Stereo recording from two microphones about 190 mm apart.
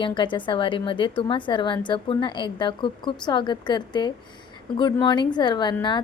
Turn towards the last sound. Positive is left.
turn(degrees=25)  # may be behind; listen again after turning